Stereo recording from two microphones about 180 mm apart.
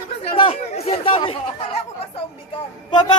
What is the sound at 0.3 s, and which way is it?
Chatter, 30° left (ahead or behind).